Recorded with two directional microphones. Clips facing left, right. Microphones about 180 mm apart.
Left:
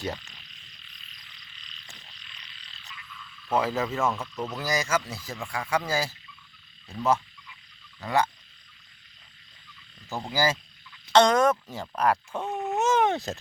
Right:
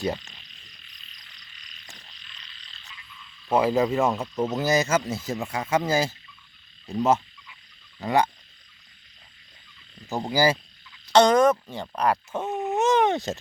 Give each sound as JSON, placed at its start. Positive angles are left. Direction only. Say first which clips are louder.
{"t": 3.5, "sound": "speech", "louder": "right 5 dB", "side_deg": -15}
{"t": 7.9, "sound": "speech", "louder": "right 3 dB", "side_deg": -20}
{"t": 10.1, "sound": "speech", "louder": "right 5 dB", "side_deg": -15}
{"t": 11.1, "sound": "speech", "louder": "right 3 dB", "side_deg": 0}
{"t": 12.7, "sound": "a sound", "louder": "right 3 dB", "side_deg": 0}